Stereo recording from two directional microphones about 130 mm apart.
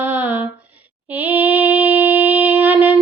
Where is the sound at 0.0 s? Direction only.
15° right (ahead or behind).